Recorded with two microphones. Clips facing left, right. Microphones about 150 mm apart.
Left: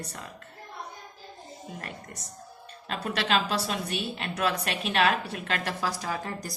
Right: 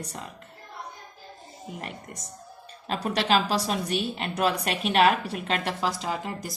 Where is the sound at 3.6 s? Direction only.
30° right (ahead or behind).